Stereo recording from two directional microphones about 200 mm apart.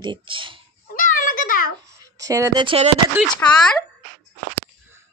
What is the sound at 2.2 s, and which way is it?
Speech, 15° right (ahead or behind).